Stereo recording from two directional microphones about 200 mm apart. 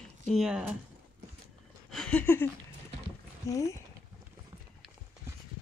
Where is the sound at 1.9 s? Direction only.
5° left (ahead or behind).